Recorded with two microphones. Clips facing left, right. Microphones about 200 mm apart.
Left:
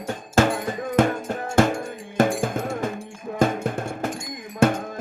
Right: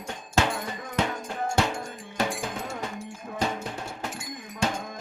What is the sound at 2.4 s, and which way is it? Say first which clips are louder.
Cowbell: left 8 dB; 50° left (ahead or behind).